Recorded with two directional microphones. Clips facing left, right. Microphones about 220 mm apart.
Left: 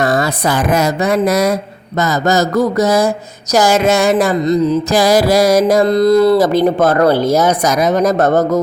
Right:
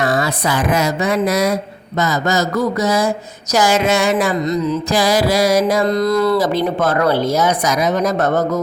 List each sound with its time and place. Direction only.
0.0 s speech: 45° left (ahead or behind)
2.0 s music: 40° left (ahead or behind)
6.4 s speech: 45° left (ahead or behind)